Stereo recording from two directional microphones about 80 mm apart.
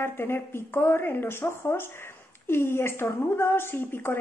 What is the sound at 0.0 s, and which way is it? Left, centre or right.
A woman's voice, left.